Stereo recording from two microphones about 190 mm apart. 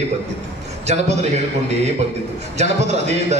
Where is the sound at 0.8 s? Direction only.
35° right (ahead or behind).